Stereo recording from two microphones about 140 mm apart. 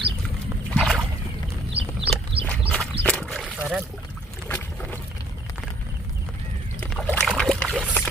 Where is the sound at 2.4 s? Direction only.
40° right (ahead or behind).